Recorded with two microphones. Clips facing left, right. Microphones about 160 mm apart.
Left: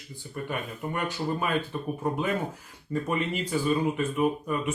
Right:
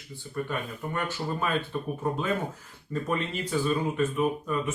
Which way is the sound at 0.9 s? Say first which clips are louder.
Left 2 dB; 15° left (ahead or behind).